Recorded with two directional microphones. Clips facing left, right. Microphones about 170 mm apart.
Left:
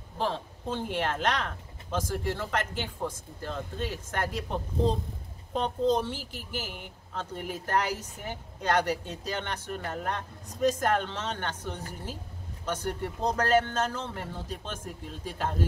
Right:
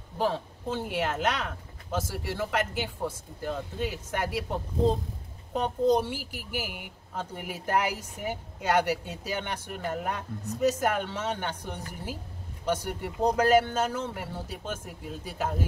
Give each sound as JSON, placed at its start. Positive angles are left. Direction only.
{"t": 0.2, "sound": "speech", "side_deg": -10}